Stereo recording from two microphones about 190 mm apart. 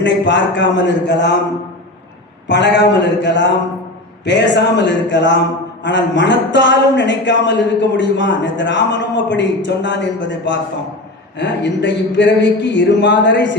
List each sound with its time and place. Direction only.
0.0 s a man's voice: 70° left (ahead or behind)
2.5 s a man's voice: 65° left (ahead or behind)